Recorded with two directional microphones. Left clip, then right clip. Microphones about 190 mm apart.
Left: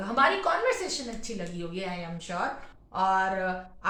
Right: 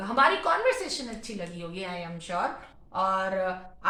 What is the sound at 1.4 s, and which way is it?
Speech, 10° left (ahead or behind).